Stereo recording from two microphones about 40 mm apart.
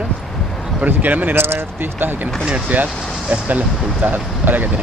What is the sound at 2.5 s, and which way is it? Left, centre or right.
Speech, right.